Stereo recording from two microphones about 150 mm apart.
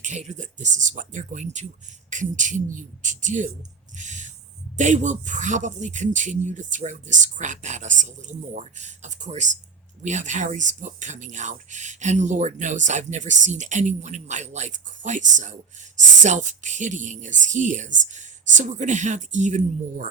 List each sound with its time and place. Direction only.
0.0 s speech: 50° right (ahead or behind)
3.9 s a sound: 55° right (ahead or behind)
4.8 s speech: 55° right (ahead or behind)